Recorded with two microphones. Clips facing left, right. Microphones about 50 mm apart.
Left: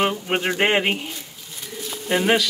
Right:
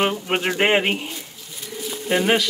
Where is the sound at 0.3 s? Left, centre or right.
Right.